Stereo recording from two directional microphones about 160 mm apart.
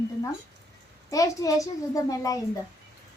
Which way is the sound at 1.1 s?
20° left (ahead or behind).